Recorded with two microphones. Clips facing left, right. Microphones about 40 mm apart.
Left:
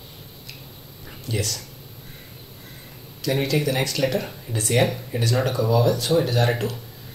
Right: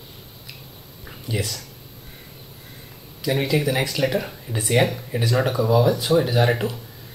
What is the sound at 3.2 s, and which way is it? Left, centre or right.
Speech, centre.